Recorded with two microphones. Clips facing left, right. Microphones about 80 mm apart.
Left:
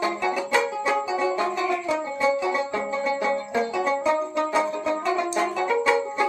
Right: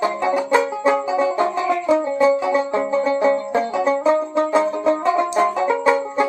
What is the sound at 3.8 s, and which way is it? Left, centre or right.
Banjo, right.